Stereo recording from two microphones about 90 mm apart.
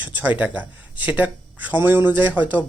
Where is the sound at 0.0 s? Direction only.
15° right (ahead or behind).